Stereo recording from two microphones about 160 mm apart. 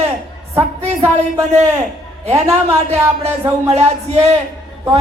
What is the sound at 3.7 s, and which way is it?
Music, 45° right (ahead or behind).